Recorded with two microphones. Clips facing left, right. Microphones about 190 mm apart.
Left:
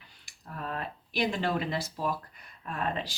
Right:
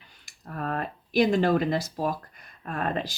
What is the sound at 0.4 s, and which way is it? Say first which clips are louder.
Speech: right 5 dB; 50° right (ahead or behind).